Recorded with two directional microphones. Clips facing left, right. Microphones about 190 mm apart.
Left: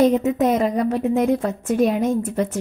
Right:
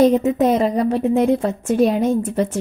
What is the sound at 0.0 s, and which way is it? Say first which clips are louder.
A woman's voice: right 2 dB; 30° right (ahead or behind).